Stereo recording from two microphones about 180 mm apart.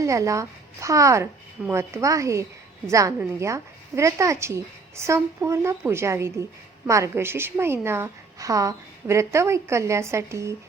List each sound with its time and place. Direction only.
0.0 s a woman's voice: 15° right (ahead or behind)